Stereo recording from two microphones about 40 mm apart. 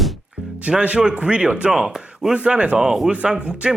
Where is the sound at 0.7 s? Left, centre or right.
Right.